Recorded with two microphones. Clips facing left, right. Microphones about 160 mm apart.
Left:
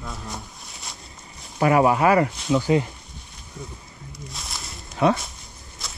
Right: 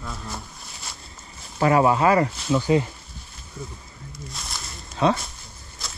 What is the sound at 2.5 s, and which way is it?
Speech, 20° left (ahead or behind).